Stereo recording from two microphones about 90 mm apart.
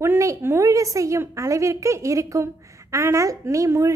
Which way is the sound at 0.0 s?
30° right (ahead or behind).